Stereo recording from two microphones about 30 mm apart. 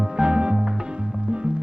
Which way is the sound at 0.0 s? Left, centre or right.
Right.